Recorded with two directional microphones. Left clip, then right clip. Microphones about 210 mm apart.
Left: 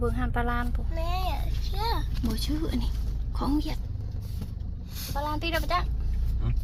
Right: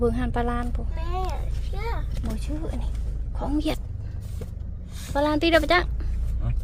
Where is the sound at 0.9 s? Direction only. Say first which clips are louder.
Even; centre (ahead or behind).